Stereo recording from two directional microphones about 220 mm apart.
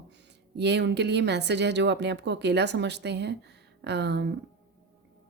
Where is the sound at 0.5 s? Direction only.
50° right (ahead or behind).